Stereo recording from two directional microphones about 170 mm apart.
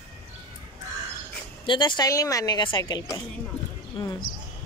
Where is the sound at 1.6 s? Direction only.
25° left (ahead or behind).